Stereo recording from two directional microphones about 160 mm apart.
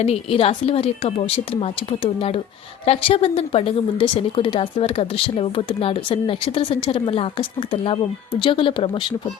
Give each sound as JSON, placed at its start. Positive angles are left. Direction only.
{"t": 0.0, "sound": "a woman's voice", "side_deg": 35}